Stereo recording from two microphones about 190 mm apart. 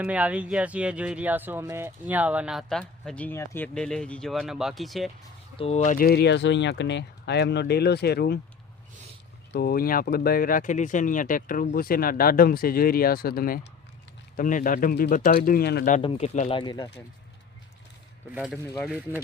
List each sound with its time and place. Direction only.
0.0 s speech: 5° right (ahead or behind)
5.5 s speech: 35° left (ahead or behind); by 8.4 s 55° left (ahead or behind)
9.5 s speech: 55° left (ahead or behind)
16.0 s speech: 30° left (ahead or behind)
16.6 s speech: 25° left (ahead or behind)
18.3 s speech: 5° right (ahead or behind)